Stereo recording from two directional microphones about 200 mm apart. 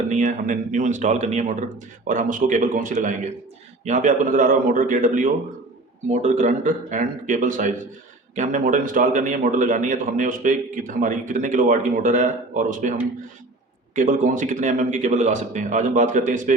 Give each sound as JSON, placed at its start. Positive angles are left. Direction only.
{"t": 0.1, "sound": "a man's voice", "side_deg": -40}
{"t": 13.9, "sound": "a man's voice", "side_deg": -40}